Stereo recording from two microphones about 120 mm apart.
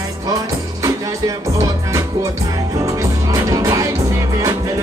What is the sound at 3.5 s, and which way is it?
Music, 30° right (ahead or behind).